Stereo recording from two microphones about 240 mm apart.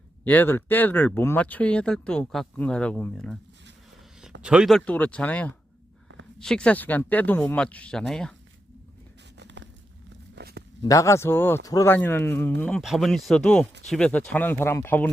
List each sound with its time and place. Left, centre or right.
0.3 s speech: centre
4.4 s speech: centre
9.4 s a sound: right
10.8 s speech: centre